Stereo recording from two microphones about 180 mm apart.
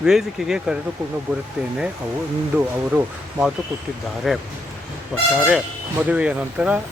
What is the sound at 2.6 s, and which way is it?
Speech, 5° right (ahead or behind).